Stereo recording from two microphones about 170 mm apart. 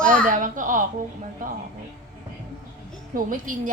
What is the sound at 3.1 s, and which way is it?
Speech, 55° right (ahead or behind).